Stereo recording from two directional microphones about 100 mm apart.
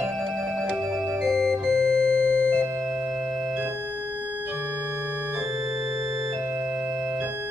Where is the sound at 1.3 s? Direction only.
5° left (ahead or behind).